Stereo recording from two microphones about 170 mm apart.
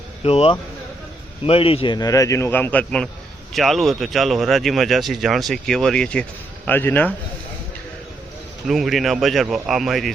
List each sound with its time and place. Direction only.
0.3 s a man's voice: 35° left (ahead or behind); by 7.1 s 10° left (ahead or behind)
8.6 s speech: centre (ahead or behind)